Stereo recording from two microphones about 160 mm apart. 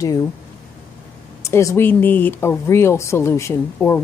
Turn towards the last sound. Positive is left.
turn(degrees=15)  # may be behind; listen again after turning